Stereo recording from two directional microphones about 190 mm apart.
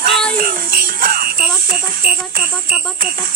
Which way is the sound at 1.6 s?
50° right (ahead or behind).